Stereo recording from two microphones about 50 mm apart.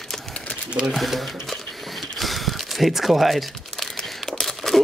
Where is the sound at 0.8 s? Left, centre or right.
Centre.